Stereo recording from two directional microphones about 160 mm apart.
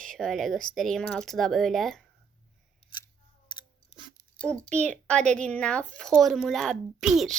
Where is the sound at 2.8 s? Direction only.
40° left (ahead or behind).